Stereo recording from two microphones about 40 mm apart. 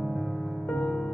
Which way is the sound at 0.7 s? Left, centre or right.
Centre.